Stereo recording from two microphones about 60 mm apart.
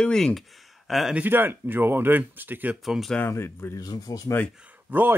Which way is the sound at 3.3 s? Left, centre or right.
Left.